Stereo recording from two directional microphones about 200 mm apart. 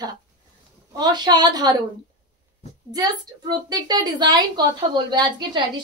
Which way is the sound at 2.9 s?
20° right (ahead or behind).